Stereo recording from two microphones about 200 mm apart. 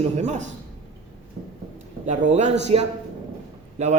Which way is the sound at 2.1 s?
35° right (ahead or behind).